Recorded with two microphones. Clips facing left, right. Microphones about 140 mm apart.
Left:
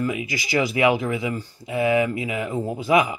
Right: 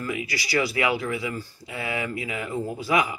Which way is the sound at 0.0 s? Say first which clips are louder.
Left 4 dB; 20° left (ahead or behind).